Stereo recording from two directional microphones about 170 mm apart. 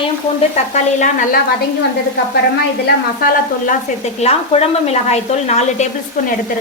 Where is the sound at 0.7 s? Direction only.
45° left (ahead or behind).